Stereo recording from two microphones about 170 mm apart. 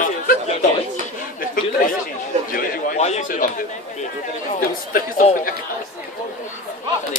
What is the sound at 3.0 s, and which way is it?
Speech, 45° left (ahead or behind).